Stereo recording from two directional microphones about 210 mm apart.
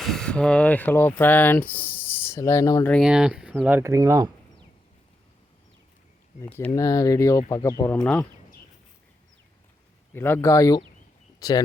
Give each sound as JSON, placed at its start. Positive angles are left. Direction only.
{"t": 0.0, "sound": "speech", "side_deg": 0}
{"t": 2.9, "sound": "speech", "side_deg": -5}
{"t": 6.4, "sound": "speech", "side_deg": 15}
{"t": 10.1, "sound": "speech", "side_deg": 10}